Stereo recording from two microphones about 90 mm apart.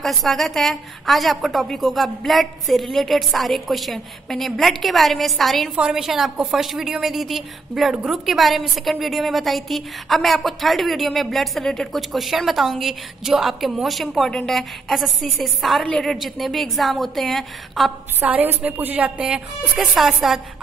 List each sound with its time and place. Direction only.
0.0 s a woman's voice: centre (ahead or behind)
18.2 s a woman's voice: 20° right (ahead or behind); by 20.3 s 5° right (ahead or behind)